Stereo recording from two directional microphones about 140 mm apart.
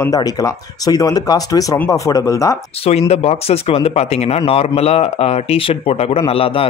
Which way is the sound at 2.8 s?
45° left (ahead or behind).